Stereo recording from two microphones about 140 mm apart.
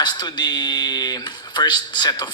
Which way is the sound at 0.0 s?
30° left (ahead or behind).